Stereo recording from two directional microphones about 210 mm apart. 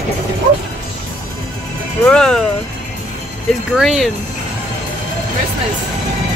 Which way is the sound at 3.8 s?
Centre (ahead or behind).